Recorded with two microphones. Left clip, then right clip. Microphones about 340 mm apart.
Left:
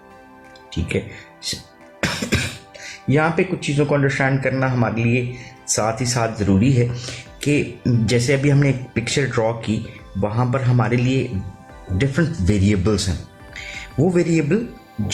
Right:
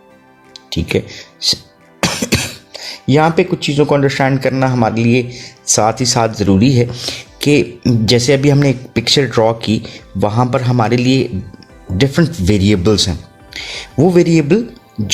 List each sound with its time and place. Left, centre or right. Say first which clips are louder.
0.7 s speech: right 7 dB; right
2.0 s music: right 6 dB; right
3.1 s speech: right 7 dB; right